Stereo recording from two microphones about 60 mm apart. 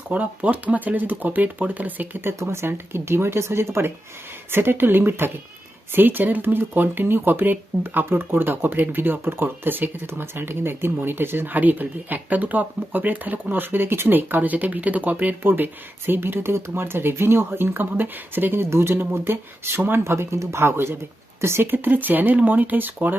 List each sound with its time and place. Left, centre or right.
0.1 s speech: right
2.4 s speech: right